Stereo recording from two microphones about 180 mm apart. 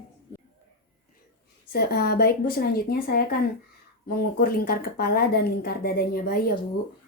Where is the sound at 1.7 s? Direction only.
60° left (ahead or behind).